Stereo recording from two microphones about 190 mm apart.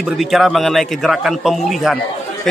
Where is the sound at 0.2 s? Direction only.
Centre (ahead or behind).